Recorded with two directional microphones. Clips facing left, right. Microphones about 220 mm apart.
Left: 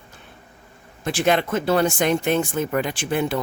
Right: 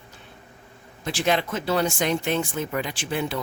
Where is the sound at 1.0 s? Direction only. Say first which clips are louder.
Left 4 dB; 55° left (ahead or behind).